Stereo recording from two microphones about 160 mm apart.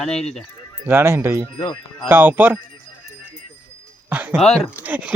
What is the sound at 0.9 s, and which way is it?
Speech, 15° right (ahead or behind).